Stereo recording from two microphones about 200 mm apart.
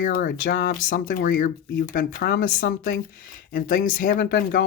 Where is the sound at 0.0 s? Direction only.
50° left (ahead or behind).